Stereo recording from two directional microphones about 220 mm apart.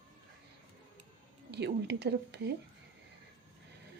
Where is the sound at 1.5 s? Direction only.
50° right (ahead or behind).